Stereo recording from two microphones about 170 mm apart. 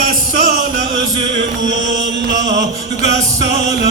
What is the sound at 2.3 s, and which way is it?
Music, 25° right (ahead or behind).